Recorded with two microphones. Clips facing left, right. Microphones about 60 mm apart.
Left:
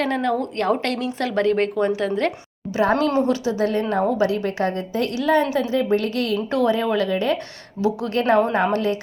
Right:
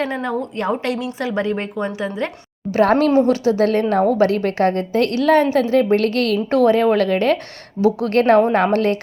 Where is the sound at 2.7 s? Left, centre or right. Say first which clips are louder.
Right 5 dB; right.